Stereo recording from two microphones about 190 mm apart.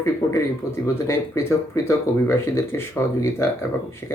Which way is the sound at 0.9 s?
15° left (ahead or behind).